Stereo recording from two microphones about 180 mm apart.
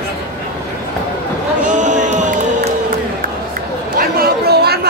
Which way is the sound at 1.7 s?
45° right (ahead or behind).